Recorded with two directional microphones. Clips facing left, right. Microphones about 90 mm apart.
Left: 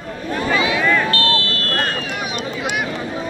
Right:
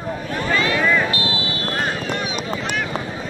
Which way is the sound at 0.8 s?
5° right (ahead or behind).